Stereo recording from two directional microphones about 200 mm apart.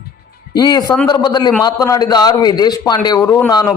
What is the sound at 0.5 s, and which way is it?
A man's voice, 20° left (ahead or behind).